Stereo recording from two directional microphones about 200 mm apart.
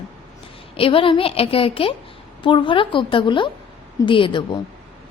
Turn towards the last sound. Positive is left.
turn(degrees=25)  # may be behind; listen again after turning